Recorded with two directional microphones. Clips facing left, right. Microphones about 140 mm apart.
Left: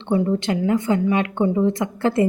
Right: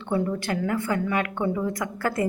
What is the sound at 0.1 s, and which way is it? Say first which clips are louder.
A woman's voice: left 6 dB; 20° left (ahead or behind).